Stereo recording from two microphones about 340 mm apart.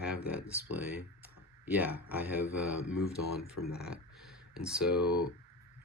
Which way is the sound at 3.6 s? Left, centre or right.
Left.